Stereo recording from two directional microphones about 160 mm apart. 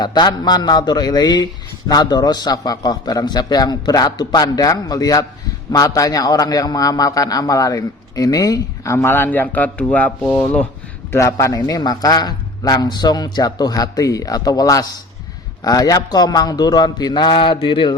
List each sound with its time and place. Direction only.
0.0 s a man's voice: 25° left (ahead or behind)